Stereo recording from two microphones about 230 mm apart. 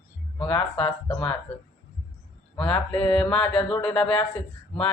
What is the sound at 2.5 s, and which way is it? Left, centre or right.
Speech, centre.